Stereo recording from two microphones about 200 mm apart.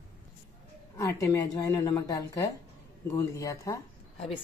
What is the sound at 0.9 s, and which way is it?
A woman's voice, 15° left (ahead or behind).